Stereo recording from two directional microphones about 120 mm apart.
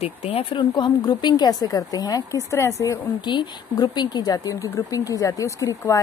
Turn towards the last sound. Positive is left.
turn(degrees=30)  # may be behind; listen again after turning